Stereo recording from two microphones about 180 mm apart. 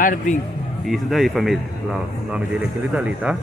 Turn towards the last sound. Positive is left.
turn(degrees=-5)  # may be behind; listen again after turning